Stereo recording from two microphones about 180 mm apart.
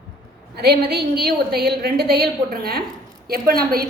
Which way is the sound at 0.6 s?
65° right (ahead or behind).